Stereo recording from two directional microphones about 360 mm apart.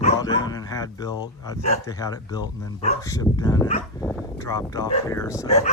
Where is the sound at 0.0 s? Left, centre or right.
Centre.